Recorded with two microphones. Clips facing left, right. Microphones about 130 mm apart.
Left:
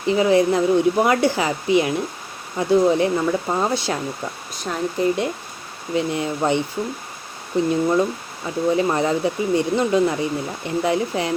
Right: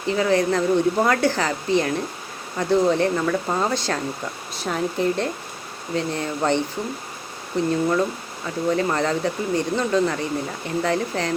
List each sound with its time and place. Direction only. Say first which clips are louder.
0.0 s speech: left 4 dB; 15° left (ahead or behind)
4.6 s speech: left 1 dB; centre (ahead or behind)